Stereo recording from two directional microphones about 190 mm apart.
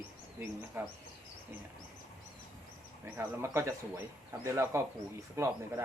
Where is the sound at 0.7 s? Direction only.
15° right (ahead or behind).